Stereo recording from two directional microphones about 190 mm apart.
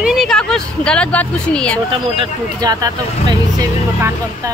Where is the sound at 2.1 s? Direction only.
20° right (ahead or behind).